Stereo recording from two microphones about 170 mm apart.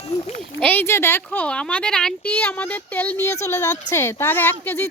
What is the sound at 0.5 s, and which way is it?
Speech, 10° left (ahead or behind).